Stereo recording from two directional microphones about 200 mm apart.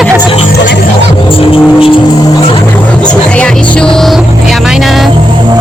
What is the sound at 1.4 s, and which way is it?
Music, 25° left (ahead or behind).